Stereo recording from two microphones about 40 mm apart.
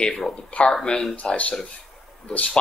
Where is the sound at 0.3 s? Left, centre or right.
Left.